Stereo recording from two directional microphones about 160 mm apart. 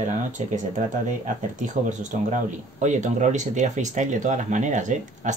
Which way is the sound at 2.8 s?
50° right (ahead or behind).